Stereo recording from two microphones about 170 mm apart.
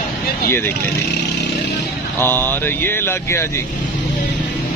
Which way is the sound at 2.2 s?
10° left (ahead or behind).